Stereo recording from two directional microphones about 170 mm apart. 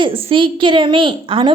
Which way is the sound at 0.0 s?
30° right (ahead or behind).